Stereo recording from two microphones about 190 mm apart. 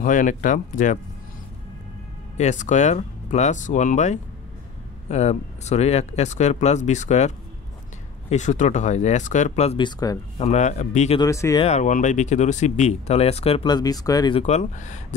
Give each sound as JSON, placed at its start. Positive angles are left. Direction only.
{"t": 0.0, "sound": "speech", "side_deg": 45}
{"t": 2.3, "sound": "speech", "side_deg": 40}
{"t": 9.8, "sound": "speech", "side_deg": 20}
{"t": 10.3, "sound": "speech", "side_deg": 35}
{"t": 11.1, "sound": "speech", "side_deg": 15}
{"t": 11.6, "sound": "speech", "side_deg": 40}
{"t": 14.4, "sound": "speech", "side_deg": 35}